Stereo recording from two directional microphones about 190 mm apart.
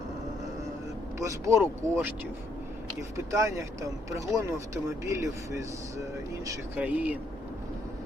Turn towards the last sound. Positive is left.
turn(degrees=-10)  # may be behind; listen again after turning